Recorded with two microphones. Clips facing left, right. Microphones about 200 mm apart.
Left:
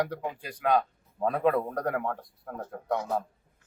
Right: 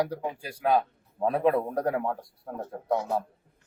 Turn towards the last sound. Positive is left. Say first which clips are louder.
# right 2 dB
turn(degrees=-10)  # may be behind; listen again after turning